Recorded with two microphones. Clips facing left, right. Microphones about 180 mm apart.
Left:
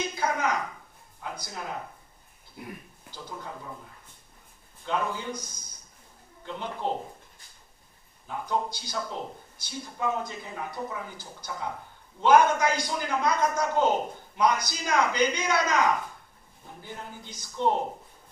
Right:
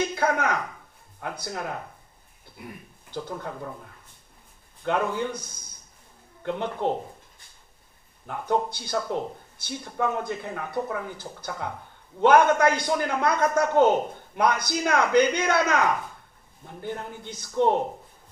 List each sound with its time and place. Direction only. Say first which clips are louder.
0.1 s a sound: right 3 dB; 60° right (ahead or behind)
1.4 s a man's voice: right 6 dB; 60° right (ahead or behind)
3.1 s a man's voice: right 7 dB; 60° right (ahead or behind)
4.8 s a man's voice: right 5 dB; 60° right (ahead or behind)
8.3 s a man's voice: right 4 dB; 60° right (ahead or behind)
16.8 s a man's voice: right 8 dB; 60° right (ahead or behind)